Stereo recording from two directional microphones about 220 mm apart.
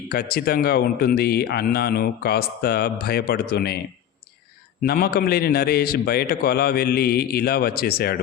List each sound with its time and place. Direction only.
0.1 s a man's voice: 45° left (ahead or behind)
4.8 s a man's voice: 45° left (ahead or behind)